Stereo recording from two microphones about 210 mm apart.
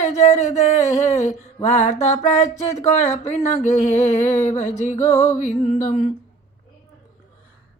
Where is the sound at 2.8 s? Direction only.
35° left (ahead or behind).